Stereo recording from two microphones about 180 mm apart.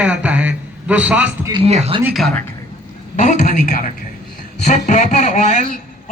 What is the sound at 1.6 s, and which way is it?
Speech, 35° right (ahead or behind).